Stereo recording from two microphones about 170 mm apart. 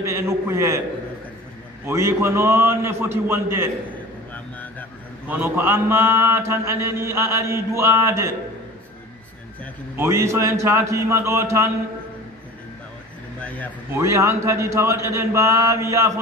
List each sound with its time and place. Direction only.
0.0 s mantra: 15° right (ahead or behind)
1.9 s mantra: 15° right (ahead or behind)
4.3 s a sound: 10° left (ahead or behind)
5.3 s mantra: 15° right (ahead or behind)
9.9 s mantra: 15° right (ahead or behind)
13.9 s mantra: 15° right (ahead or behind)